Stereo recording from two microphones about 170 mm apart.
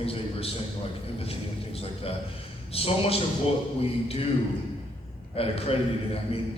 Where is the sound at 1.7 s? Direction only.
35° left (ahead or behind).